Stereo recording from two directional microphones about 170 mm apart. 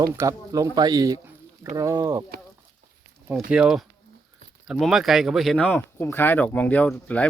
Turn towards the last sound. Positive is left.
turn(degrees=10)  # may be behind; listen again after turning